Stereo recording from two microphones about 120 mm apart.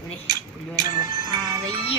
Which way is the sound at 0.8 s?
35° right (ahead or behind).